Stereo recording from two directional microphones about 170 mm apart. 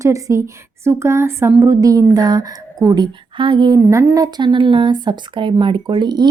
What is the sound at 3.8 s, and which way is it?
Speech, 15° right (ahead or behind).